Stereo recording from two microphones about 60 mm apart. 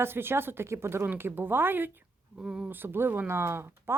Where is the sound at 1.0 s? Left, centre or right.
Right.